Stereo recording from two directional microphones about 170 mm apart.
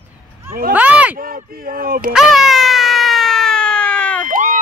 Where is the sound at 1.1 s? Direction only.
55° right (ahead or behind).